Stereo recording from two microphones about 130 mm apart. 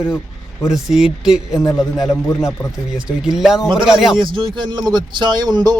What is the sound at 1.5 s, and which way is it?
Speech, 25° left (ahead or behind).